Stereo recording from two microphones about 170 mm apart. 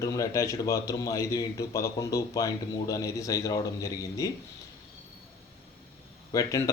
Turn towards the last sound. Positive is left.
turn(degrees=20)  # may be behind; listen again after turning